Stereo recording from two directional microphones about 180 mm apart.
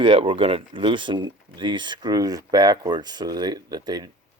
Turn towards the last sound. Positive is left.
turn(degrees=-20)  # may be behind; listen again after turning